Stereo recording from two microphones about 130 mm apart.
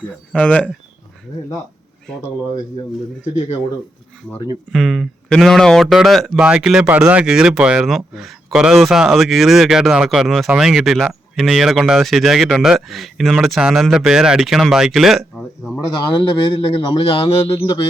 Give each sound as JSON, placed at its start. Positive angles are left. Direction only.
{"t": 0.0, "sound": "speech", "side_deg": 10}
{"t": 4.7, "sound": "speech", "side_deg": 0}
{"t": 16.1, "sound": "speech", "side_deg": 40}